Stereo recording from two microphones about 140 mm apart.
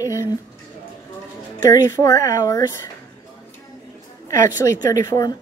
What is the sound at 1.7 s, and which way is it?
Speech, 25° left (ahead or behind).